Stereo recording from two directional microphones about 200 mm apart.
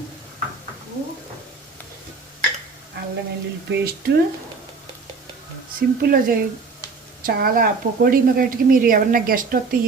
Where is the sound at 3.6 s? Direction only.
55° right (ahead or behind).